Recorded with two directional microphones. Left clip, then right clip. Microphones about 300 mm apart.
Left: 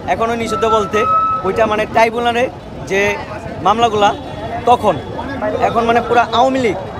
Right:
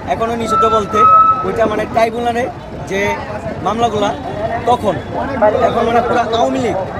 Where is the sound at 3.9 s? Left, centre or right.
Centre.